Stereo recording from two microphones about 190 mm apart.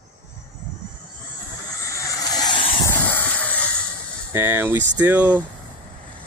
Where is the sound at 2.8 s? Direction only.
10° left (ahead or behind).